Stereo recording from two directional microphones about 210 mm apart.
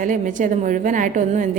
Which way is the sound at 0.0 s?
40° right (ahead or behind).